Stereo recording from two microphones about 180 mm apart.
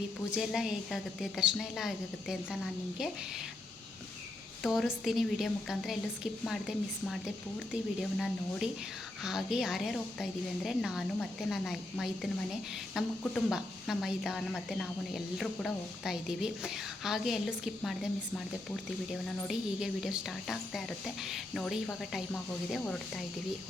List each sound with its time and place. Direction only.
0.3 s a woman's voice: 5° right (ahead or behind)
4.6 s a woman's voice: centre (ahead or behind)
8.2 s a woman's voice: centre (ahead or behind)
19.5 s a woman's voice: centre (ahead or behind)